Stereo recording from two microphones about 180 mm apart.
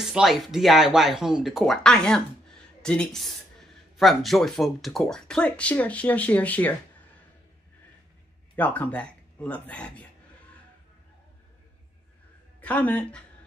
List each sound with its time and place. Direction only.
0.0 s speech: centre (ahead or behind)
8.5 s speech: 10° left (ahead or behind)
12.5 s a woman's voice: 10° left (ahead or behind)